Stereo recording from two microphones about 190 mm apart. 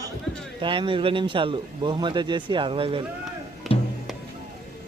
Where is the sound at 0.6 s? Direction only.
25° right (ahead or behind).